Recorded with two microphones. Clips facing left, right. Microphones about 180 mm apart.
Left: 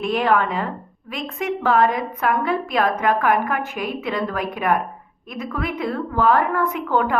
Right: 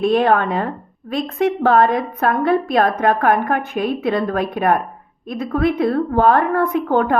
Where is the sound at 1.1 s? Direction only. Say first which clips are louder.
Right 7 dB; 35° right (ahead or behind).